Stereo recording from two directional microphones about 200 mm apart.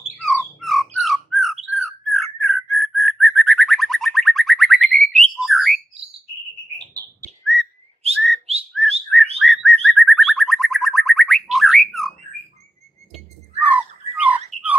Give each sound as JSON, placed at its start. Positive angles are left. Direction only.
{"t": 0.0, "sound": "bird", "side_deg": 0}
{"t": 7.5, "sound": "whistling", "side_deg": 0}
{"t": 8.0, "sound": "whistling", "side_deg": -30}
{"t": 9.4, "sound": "bird", "side_deg": 0}
{"t": 13.1, "sound": "squawk", "side_deg": -5}